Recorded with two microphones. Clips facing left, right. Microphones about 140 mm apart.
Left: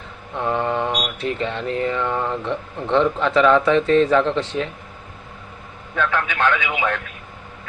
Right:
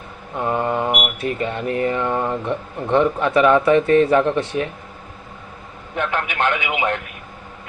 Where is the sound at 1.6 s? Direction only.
55° right (ahead or behind).